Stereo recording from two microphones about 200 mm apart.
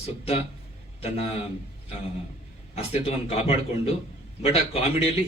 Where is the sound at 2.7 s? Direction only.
30° left (ahead or behind).